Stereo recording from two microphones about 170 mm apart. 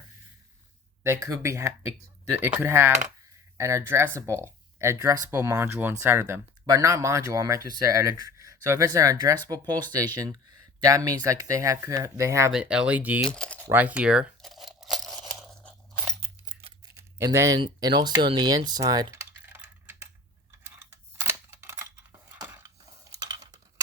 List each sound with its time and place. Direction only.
1.0 s speech: 15° right (ahead or behind)
12.5 s speech: 5° right (ahead or behind)
13.2 s speech: 5° left (ahead or behind)
13.7 s tearing: 10° right (ahead or behind); by 16.1 s 5° left (ahead or behind)
16.5 s a sound: 30° right (ahead or behind)
17.0 s a sound: 15° right (ahead or behind)
17.6 s speech: 25° right (ahead or behind)
21.2 s camera: 15° right (ahead or behind)
22.3 s a sound: 20° right (ahead or behind)